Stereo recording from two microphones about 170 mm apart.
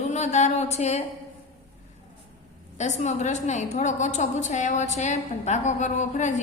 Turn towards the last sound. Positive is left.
turn(degrees=45)  # may be behind; listen again after turning